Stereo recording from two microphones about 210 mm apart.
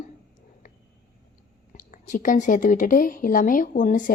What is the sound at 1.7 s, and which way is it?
Speech, 40° left (ahead or behind).